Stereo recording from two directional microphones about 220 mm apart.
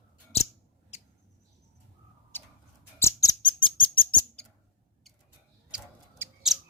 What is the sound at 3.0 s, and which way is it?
Rodents, 15° left (ahead or behind).